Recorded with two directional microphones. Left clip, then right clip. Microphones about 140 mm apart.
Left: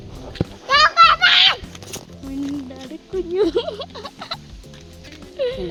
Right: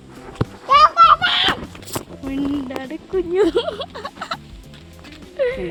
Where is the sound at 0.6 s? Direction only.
50° left (ahead or behind).